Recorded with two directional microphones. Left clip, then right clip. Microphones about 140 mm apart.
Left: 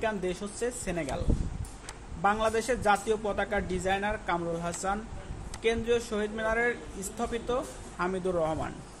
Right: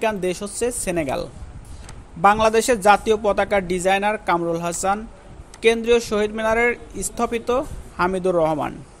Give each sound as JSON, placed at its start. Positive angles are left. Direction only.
{"t": 0.0, "sound": "speech", "side_deg": -75}
{"t": 2.2, "sound": "speech", "side_deg": -70}